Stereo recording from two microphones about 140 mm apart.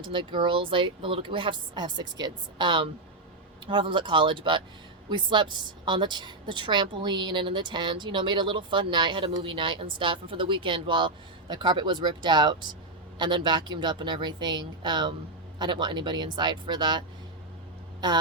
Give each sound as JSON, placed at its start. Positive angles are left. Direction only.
{"t": 0.0, "sound": "a woman's voice", "side_deg": -35}